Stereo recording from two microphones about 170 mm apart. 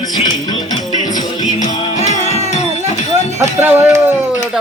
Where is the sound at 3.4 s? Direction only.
15° right (ahead or behind).